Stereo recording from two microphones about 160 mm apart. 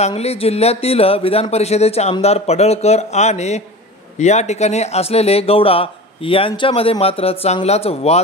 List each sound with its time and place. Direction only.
0.0 s a man's voice: 40° left (ahead or behind)